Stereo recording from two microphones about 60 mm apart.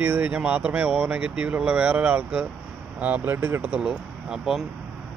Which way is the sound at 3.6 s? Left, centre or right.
Right.